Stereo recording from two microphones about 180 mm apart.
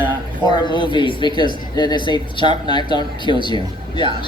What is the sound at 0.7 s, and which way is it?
Speech, 25° left (ahead or behind).